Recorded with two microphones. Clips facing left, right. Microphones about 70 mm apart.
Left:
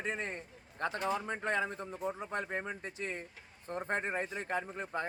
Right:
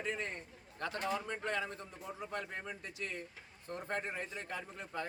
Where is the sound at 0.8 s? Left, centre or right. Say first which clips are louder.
Left 3 dB; left.